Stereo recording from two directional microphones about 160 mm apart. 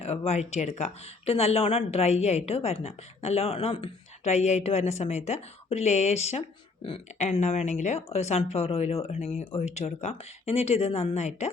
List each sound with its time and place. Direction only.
0.0 s speech: 40° left (ahead or behind)